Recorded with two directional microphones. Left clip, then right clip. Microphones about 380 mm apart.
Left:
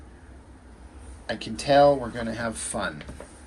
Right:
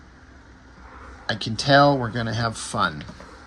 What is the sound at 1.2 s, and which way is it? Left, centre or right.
Speech, centre.